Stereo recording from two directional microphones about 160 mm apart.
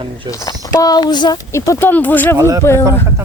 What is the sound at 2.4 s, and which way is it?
Speech, 20° right (ahead or behind).